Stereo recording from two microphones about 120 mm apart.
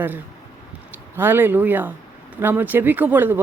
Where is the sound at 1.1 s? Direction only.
15° right (ahead or behind).